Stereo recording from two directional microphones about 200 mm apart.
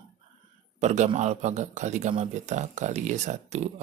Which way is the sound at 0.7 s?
35° right (ahead or behind).